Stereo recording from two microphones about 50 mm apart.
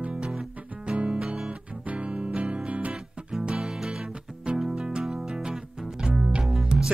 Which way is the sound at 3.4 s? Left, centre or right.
Centre.